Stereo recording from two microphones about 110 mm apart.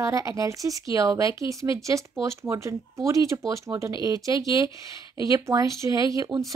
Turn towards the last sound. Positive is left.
turn(degrees=-30)  # may be behind; listen again after turning